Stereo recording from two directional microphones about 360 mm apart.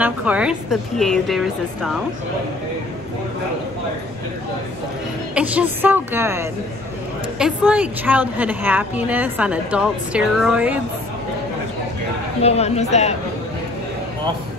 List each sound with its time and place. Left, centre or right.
0.0 s a woman's voice: centre
5.3 s a woman's voice: centre
12.4 s speech: centre